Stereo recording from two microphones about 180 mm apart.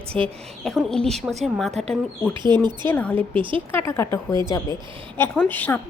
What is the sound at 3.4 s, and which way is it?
Speech, 30° right (ahead or behind).